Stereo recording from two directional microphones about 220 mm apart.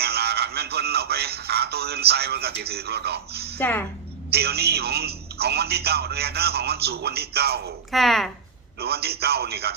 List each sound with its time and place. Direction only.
0.0 s music: 45° right (ahead or behind)
3.6 s a woman's voice: 10° left (ahead or behind)
4.3 s a man's voice: 45° right (ahead or behind)
7.9 s a woman's voice: centre (ahead or behind)
8.8 s a man's voice: 45° right (ahead or behind)